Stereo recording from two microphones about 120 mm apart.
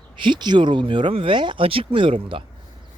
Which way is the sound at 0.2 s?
40° right (ahead or behind).